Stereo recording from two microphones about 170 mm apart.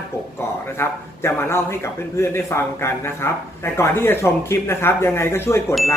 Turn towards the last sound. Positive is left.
turn(degrees=15)  # may be behind; listen again after turning